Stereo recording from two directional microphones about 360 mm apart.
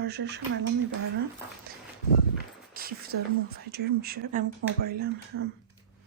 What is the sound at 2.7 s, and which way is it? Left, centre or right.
Speech, right.